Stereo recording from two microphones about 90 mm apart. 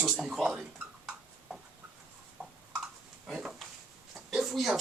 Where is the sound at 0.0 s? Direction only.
5° right (ahead or behind).